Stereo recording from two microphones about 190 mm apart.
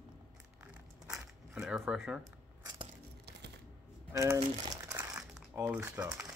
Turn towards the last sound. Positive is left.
turn(degrees=-10)  # may be behind; listen again after turning